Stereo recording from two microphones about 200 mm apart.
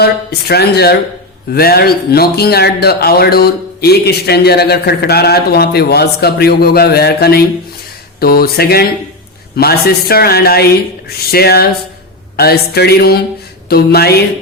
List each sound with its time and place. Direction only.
0.0 s speech: 50° left (ahead or behind)